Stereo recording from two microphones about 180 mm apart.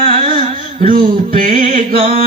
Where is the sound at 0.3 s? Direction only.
50° right (ahead or behind).